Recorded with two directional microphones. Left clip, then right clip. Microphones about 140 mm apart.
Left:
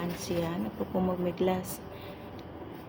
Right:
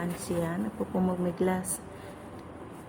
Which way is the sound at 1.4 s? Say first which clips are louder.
Even; 30° right (ahead or behind).